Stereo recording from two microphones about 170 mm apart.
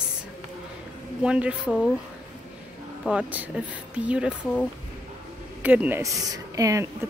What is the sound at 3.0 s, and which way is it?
A woman's voice, 10° right (ahead or behind).